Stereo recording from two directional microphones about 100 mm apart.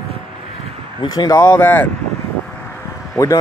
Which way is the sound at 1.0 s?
45° left (ahead or behind).